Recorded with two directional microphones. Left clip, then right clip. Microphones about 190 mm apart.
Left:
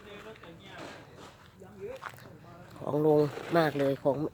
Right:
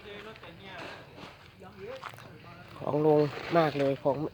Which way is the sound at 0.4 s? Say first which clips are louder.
Right 2 dB; 35° right (ahead or behind).